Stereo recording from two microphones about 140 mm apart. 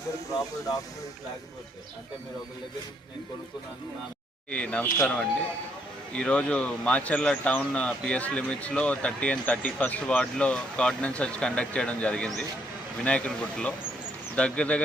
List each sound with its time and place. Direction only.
0.3 s speech: 25° left (ahead or behind)
4.5 s speech: 10° left (ahead or behind)